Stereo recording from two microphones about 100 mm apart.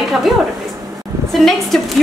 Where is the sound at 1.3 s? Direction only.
Centre (ahead or behind).